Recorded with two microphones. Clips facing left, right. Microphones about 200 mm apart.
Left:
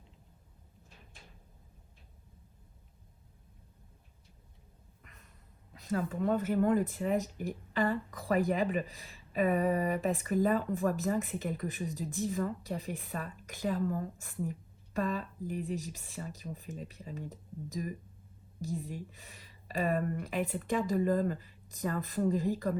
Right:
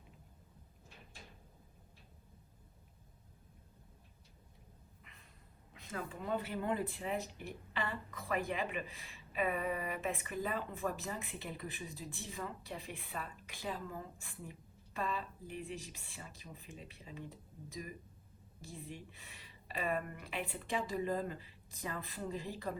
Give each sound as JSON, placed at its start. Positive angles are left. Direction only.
{"t": 5.7, "sound": "speech", "side_deg": 35}